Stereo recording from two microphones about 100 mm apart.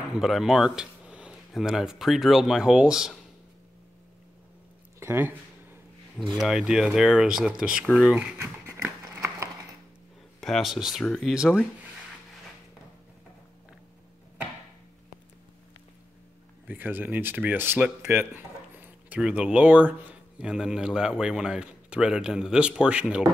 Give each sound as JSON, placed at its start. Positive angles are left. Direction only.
{"t": 0.1, "sound": "speech", "side_deg": -5}
{"t": 5.0, "sound": "speech", "side_deg": -20}
{"t": 6.4, "sound": "speech", "side_deg": -5}
{"t": 8.4, "sound": "a sound", "side_deg": -20}
{"t": 10.4, "sound": "speech", "side_deg": 0}
{"t": 16.6, "sound": "speech", "side_deg": -20}